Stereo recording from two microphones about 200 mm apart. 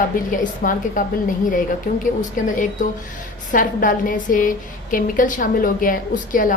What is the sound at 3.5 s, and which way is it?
A woman's voice, 40° left (ahead or behind).